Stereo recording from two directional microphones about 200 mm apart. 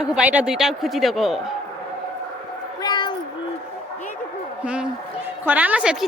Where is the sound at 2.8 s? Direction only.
20° left (ahead or behind).